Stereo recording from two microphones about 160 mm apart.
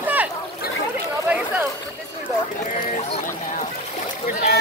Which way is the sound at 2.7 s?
50° left (ahead or behind).